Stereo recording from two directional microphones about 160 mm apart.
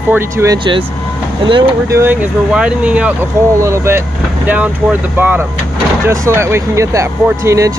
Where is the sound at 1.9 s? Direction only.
15° right (ahead or behind).